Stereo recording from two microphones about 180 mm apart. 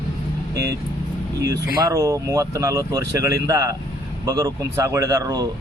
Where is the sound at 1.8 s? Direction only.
15° right (ahead or behind).